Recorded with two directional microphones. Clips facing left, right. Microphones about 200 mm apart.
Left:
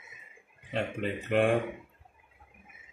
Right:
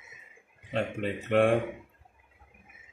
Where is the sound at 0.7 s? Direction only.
Centre (ahead or behind).